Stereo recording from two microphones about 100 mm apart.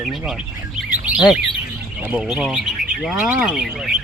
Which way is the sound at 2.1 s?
5° right (ahead or behind).